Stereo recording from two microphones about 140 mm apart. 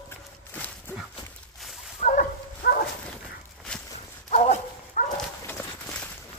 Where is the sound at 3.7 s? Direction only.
10° left (ahead or behind).